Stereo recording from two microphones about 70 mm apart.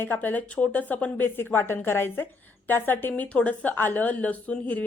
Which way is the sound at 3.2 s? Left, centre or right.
Centre.